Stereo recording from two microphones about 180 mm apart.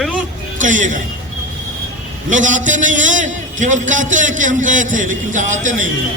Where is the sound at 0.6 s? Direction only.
45° right (ahead or behind).